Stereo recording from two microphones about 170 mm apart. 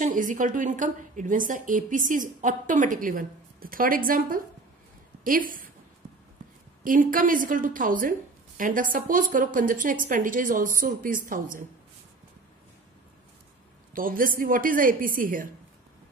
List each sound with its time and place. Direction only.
0.0 s a woman's voice: 50° right (ahead or behind)
6.8 s a woman's voice: 55° right (ahead or behind)
13.9 s a woman's voice: 55° right (ahead or behind)